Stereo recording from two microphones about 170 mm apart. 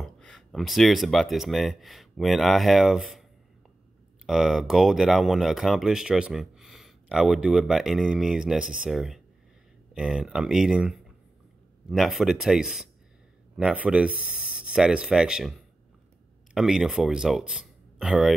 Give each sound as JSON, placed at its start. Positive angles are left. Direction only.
{"t": 0.0, "sound": "speech", "side_deg": 0}
{"t": 4.3, "sound": "speech", "side_deg": 0}
{"t": 16.5, "sound": "speech", "side_deg": 0}